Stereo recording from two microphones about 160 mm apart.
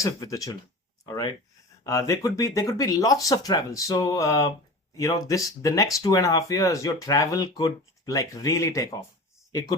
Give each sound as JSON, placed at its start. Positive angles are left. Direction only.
{"t": 0.0, "sound": "speech", "side_deg": 20}